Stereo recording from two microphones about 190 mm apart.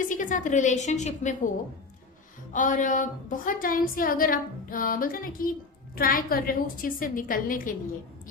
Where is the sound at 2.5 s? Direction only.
45° left (ahead or behind).